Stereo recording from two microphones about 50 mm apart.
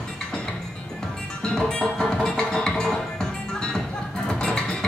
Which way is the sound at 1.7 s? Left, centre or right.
Left.